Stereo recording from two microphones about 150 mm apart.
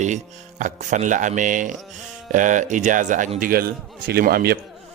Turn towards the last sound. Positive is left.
turn(degrees=-90)